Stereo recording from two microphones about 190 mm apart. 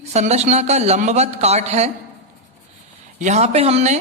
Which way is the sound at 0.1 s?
35° right (ahead or behind).